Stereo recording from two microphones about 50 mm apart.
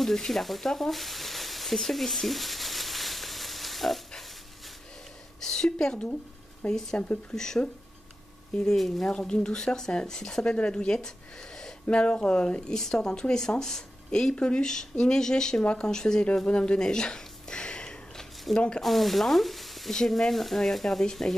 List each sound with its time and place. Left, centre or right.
0.0 s a sound: centre
5.4 s a sound: centre
5.9 s speech: left
6.7 s speech: centre
7.0 s speech: left
7.3 s speech: centre
8.7 s speech: centre
9.0 s speech: centre
16.4 s a sound: left
18.5 s speech: centre